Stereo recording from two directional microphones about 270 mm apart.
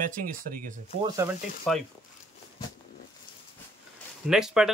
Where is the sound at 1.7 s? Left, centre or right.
Centre.